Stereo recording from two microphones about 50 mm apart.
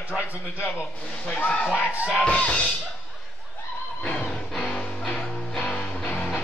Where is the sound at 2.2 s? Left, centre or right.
Left.